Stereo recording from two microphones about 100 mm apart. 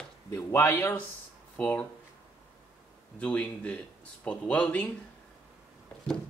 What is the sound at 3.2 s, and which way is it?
Speech, 10° left (ahead or behind).